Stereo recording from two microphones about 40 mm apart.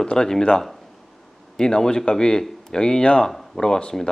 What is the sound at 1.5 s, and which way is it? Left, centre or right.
Speech, centre.